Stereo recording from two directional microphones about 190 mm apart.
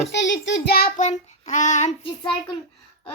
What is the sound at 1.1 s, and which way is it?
Child singing, 40° left (ahead or behind).